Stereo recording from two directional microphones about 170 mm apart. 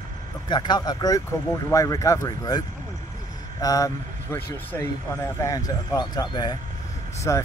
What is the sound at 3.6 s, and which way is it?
Speech, 20° left (ahead or behind).